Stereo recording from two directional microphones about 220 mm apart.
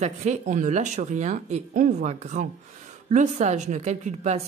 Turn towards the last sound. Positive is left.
turn(degrees=-30)  # may be behind; listen again after turning